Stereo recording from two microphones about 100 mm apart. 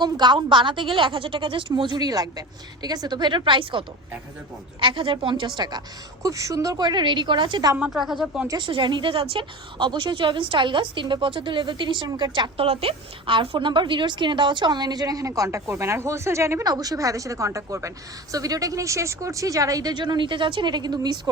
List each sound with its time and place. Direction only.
0.0 s a woman's voice: 50° right (ahead or behind)
6.2 s a woman's voice: 35° right (ahead or behind); by 7.7 s 55° right (ahead or behind)
7.8 s speech: 5° right (ahead or behind)
8.4 s a woman's voice: 50° right (ahead or behind)
12.5 s a woman's voice: 75° right (ahead or behind); by 16.6 s 30° right (ahead or behind)
16.6 s a woman's voice: 40° right (ahead or behind)